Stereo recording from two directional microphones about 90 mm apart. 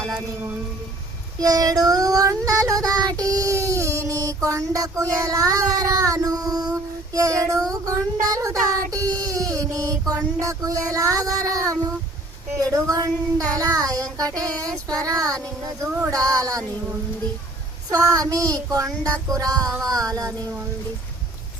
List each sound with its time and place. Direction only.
1.4 s child singing: 45° right (ahead or behind)
7.7 s speech: 40° right (ahead or behind)
16.0 s child singing: 45° right (ahead or behind)
17.9 s child singing: 40° right (ahead or behind)
19.9 s speech: 40° right (ahead or behind)